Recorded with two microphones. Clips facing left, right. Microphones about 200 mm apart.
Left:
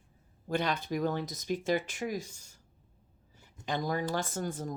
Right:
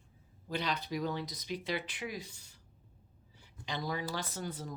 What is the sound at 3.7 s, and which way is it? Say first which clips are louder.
Speech: left 5 dB; 45° left (ahead or behind).